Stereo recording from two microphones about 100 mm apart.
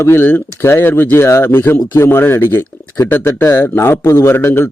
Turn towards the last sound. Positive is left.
turn(degrees=25)  # may be behind; listen again after turning